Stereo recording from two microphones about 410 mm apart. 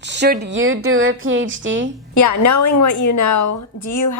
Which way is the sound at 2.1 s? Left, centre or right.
Left.